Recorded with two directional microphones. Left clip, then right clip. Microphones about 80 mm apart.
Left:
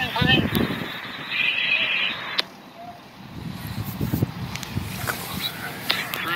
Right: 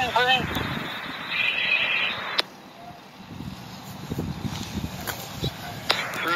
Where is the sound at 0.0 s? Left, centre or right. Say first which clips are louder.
Even; right.